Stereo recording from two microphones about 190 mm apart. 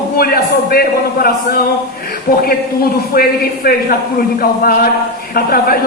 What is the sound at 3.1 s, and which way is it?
Speech, 50° left (ahead or behind).